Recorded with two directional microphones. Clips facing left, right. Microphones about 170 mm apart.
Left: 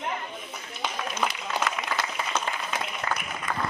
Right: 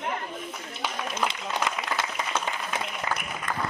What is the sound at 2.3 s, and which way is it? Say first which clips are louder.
Applause: even; 5° right (ahead or behind).